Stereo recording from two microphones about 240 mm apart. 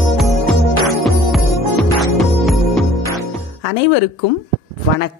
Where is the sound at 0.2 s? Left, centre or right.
Centre.